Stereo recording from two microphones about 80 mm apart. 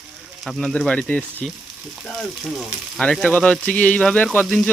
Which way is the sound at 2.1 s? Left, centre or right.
Centre.